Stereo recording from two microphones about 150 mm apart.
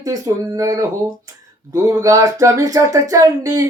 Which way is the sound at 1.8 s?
20° right (ahead or behind).